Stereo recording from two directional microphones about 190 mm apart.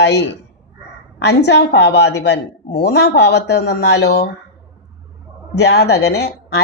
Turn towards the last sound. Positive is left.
turn(degrees=60)  # may be behind; listen again after turning